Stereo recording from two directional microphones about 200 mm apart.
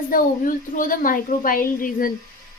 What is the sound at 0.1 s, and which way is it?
Speech, 45° left (ahead or behind).